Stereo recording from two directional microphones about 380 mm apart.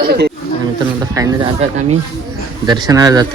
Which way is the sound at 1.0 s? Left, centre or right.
Centre.